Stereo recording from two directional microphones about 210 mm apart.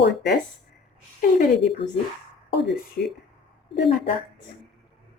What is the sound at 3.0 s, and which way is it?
Speech, 50° left (ahead or behind).